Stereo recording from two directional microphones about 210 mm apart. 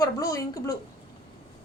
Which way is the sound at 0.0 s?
15° left (ahead or behind).